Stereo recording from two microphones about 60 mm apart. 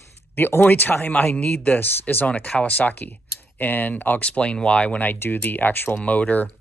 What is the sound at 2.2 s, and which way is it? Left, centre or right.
Speech, centre.